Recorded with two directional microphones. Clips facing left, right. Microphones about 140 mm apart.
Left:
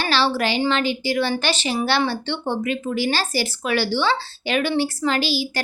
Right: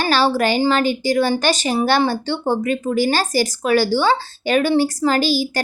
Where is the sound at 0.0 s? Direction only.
45° right (ahead or behind).